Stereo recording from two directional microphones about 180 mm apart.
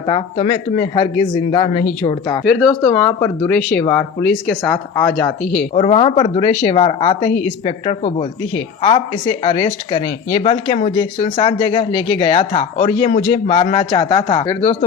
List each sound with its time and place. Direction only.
0.0 s speech: 25° left (ahead or behind)
0.3 s speech: 40° left (ahead or behind)
0.8 s speech: 25° left (ahead or behind); by 5.6 s 5° left (ahead or behind)
5.7 s speech: 35° left (ahead or behind)